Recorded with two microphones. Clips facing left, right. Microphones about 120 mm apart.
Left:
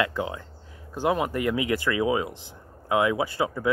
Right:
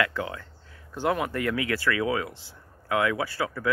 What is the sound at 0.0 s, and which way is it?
Speech, 20° left (ahead or behind).